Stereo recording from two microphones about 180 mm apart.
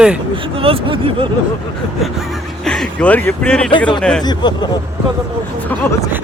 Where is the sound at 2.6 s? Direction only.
5° left (ahead or behind).